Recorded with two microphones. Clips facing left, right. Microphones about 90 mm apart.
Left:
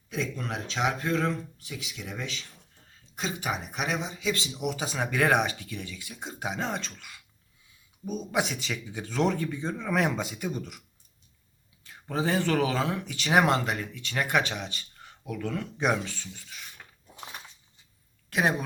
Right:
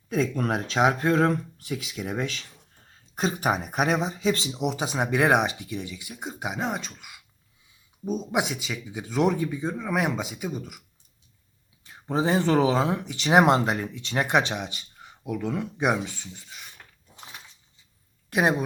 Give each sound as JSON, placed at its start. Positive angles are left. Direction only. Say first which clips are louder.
{"t": 0.1, "sound": "speech", "louder": "right 7 dB", "side_deg": -45}
{"t": 8.0, "sound": "speech", "louder": "right 3 dB", "side_deg": -20}
{"t": 11.8, "sound": "speech", "louder": "right 4 dB", "side_deg": -25}
{"t": 18.3, "sound": "a woman's voice", "louder": "right 3 dB", "side_deg": -20}